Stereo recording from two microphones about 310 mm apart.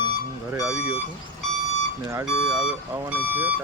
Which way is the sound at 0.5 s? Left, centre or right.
Centre.